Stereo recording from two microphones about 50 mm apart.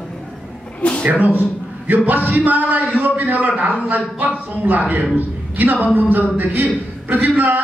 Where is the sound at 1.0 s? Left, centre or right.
Right.